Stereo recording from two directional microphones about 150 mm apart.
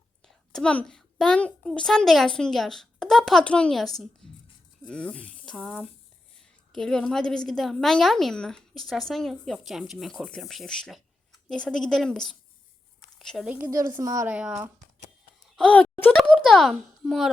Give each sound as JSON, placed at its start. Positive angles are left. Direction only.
{"t": 0.2, "sound": "a child's voice", "side_deg": 5}
{"t": 4.2, "sound": "a sound", "side_deg": 5}
{"t": 4.9, "sound": "a woman's voice", "side_deg": 10}
{"t": 13.7, "sound": "a woman's voice", "side_deg": -20}
{"t": 14.3, "sound": "speech", "side_deg": -10}
{"t": 15.4, "sound": "a sound", "side_deg": 5}
{"t": 16.4, "sound": "a child's voice", "side_deg": 0}